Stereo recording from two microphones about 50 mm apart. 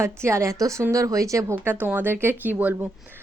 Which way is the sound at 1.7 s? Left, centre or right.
Right.